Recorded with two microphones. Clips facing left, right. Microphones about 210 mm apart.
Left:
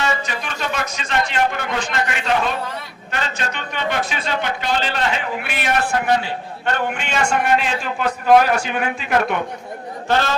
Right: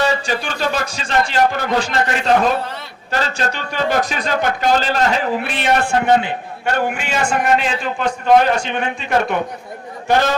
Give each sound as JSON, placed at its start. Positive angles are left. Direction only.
{"t": 0.1, "sound": "speech", "side_deg": -30}
{"t": 5.4, "sound": "speech", "side_deg": -30}
{"t": 6.7, "sound": "a man's voice", "side_deg": -5}
{"t": 10.1, "sound": "a man's voice", "side_deg": -15}